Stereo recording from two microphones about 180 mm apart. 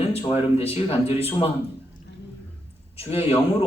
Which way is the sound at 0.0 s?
35° left (ahead or behind).